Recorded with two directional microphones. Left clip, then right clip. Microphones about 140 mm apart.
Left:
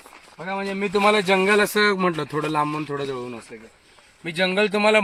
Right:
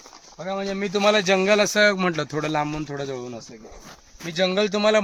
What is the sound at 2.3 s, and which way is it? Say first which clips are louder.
Speech: left 1 dB; 40° right (ahead or behind).